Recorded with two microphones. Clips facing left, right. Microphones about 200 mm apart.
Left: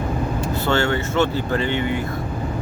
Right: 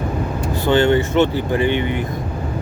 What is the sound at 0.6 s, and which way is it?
Speech, 15° right (ahead or behind).